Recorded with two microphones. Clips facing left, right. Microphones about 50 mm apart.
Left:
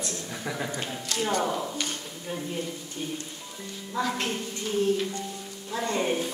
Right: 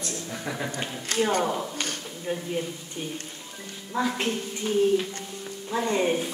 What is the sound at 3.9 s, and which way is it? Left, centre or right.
Speech, right.